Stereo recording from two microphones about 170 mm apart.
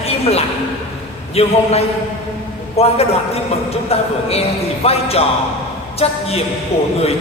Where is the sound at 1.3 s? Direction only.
35° left (ahead or behind).